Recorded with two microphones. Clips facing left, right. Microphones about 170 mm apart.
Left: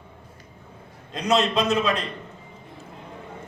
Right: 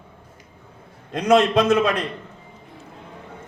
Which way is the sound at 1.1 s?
55° right (ahead or behind).